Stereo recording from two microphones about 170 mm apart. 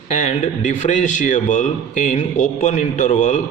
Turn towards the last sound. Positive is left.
turn(degrees=50)  # may be behind; listen again after turning